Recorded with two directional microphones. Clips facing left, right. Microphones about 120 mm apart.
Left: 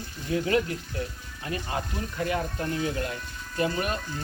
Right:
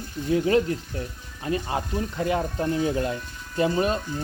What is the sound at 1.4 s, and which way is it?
Speech, 25° right (ahead or behind).